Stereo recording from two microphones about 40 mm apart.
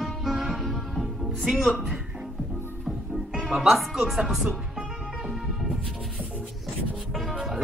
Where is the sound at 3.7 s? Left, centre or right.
Centre.